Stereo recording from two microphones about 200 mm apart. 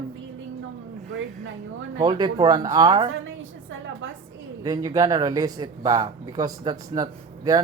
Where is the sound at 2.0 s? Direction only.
20° right (ahead or behind).